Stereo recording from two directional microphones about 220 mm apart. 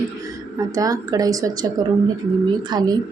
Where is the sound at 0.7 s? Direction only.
15° right (ahead or behind).